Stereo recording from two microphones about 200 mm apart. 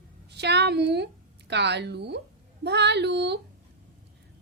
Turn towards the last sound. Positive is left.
turn(degrees=-55)  # may be behind; listen again after turning